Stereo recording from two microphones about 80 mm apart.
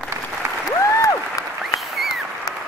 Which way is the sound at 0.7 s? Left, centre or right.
Left.